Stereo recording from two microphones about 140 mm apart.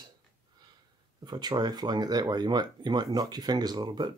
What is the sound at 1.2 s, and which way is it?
Speech, 30° right (ahead or behind).